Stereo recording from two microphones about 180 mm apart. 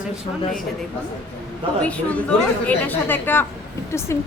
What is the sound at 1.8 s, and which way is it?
A woman's voice, 5° left (ahead or behind).